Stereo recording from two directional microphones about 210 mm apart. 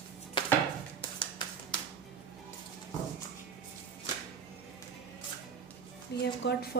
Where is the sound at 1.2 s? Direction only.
20° left (ahead or behind).